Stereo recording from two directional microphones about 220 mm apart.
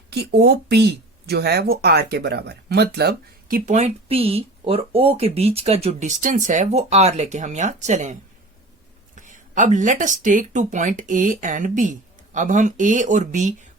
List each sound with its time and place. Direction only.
0.1 s speech: 45° right (ahead or behind)
9.1 s speech: 35° right (ahead or behind)